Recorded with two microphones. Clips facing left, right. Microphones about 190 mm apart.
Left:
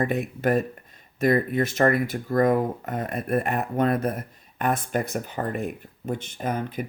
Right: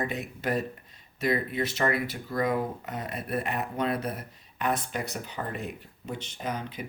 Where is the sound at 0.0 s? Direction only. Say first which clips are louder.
Left 7 dB; 55° left (ahead or behind).